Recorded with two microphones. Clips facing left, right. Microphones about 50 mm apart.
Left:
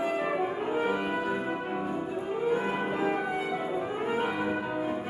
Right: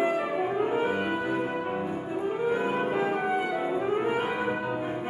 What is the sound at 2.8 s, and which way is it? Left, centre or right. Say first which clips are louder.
Music: right 3 dB; right.